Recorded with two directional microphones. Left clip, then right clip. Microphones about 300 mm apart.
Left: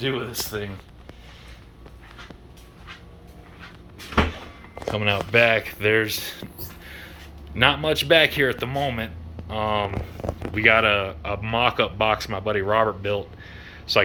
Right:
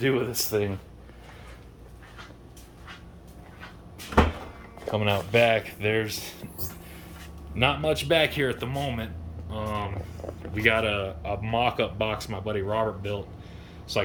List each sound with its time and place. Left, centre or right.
0.0 s speech: centre
4.9 s speech: centre
7.5 s speech: centre